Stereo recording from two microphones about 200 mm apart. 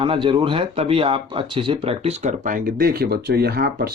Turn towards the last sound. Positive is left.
turn(degrees=-50)  # may be behind; listen again after turning